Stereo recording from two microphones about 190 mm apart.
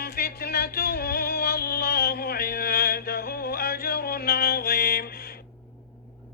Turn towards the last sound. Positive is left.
turn(degrees=55)  # may be behind; listen again after turning